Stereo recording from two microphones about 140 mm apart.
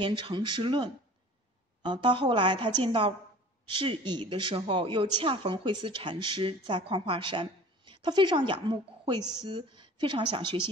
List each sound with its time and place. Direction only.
0.0 s speech: 35° right (ahead or behind)